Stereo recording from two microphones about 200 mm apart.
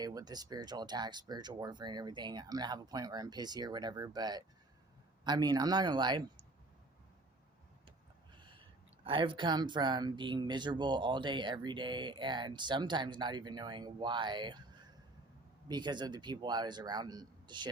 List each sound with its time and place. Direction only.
0.0 s speech: 20° right (ahead or behind)
8.4 s a sound: 25° right (ahead or behind)
9.0 s speech: 25° right (ahead or behind)